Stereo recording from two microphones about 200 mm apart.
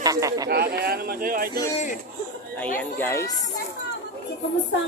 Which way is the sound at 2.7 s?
10° left (ahead or behind).